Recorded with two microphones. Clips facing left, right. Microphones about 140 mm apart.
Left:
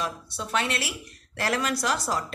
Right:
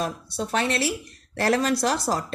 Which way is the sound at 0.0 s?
40° right (ahead or behind).